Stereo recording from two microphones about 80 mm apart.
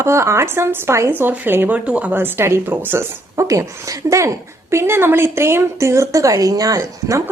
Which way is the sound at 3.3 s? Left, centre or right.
Right.